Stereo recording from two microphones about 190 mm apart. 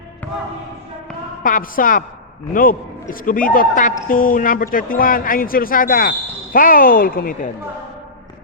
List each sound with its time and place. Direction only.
1.5 s speech: 45° left (ahead or behind)